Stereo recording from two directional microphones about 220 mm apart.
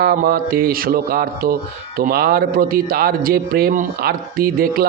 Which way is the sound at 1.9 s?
45° right (ahead or behind).